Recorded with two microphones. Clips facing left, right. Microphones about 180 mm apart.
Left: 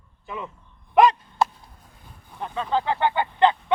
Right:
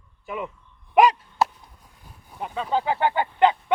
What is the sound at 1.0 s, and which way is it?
Chop, 10° right (ahead or behind).